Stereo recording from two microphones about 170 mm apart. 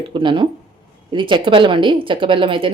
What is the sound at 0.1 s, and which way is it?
Speech, 30° right (ahead or behind).